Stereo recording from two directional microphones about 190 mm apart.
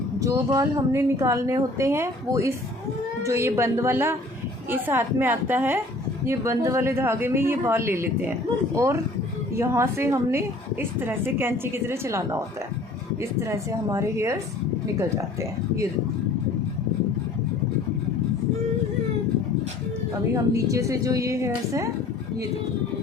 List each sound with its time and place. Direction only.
0.2 s a woman's voice: 20° right (ahead or behind)
13.4 s a woman's voice: 15° right (ahead or behind)
20.3 s a woman's voice: 15° right (ahead or behind)